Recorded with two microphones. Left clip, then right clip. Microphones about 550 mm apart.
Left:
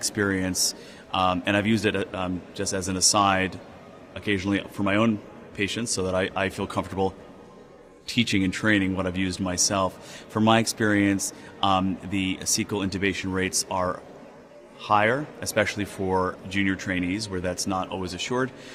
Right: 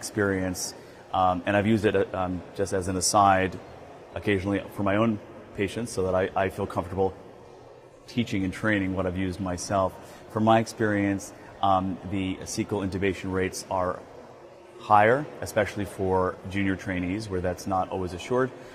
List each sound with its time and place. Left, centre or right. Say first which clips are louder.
0.2 s speech: left 1 dB; right